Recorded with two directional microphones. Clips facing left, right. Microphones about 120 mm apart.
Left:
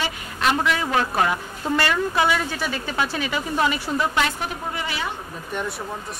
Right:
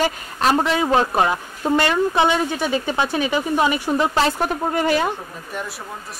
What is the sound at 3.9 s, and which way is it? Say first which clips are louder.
Speech: right 5 dB; 35° right (ahead or behind).